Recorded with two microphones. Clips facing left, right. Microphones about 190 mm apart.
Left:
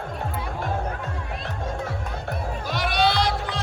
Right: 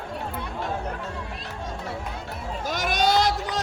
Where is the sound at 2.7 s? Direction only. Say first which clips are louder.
Even; 45° right (ahead or behind).